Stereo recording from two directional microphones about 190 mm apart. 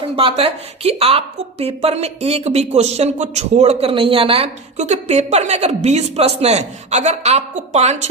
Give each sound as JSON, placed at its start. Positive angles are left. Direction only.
{"t": 0.2, "sound": "a woman's voice", "side_deg": -30}